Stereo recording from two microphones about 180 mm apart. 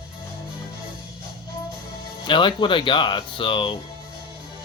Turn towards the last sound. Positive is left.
turn(degrees=25)  # may be behind; listen again after turning